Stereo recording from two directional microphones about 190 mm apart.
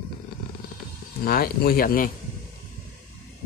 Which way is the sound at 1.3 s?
50° left (ahead or behind).